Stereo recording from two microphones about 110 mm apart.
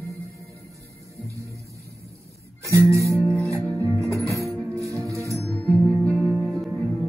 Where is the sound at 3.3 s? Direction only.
25° right (ahead or behind).